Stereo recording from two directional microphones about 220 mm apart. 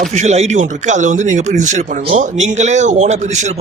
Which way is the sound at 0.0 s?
30° right (ahead or behind).